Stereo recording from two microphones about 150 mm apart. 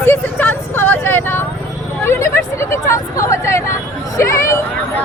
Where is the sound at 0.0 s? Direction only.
15° left (ahead or behind).